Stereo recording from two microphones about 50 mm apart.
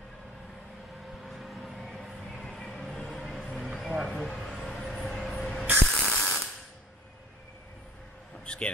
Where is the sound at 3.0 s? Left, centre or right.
Centre.